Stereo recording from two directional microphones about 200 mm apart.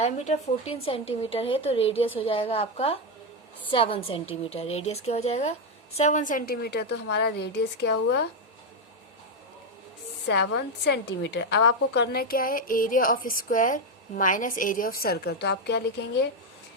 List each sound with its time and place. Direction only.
0.0 s a woman's voice: 35° left (ahead or behind); by 8.2 s 60° left (ahead or behind)
10.2 s a woman's voice: 60° left (ahead or behind)